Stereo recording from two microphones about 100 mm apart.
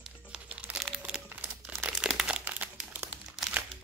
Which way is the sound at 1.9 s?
5° right (ahead or behind).